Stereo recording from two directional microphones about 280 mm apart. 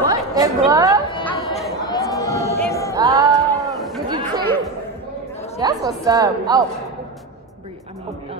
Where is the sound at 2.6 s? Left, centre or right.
Centre.